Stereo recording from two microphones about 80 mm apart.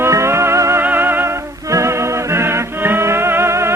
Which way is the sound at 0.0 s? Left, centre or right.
Right.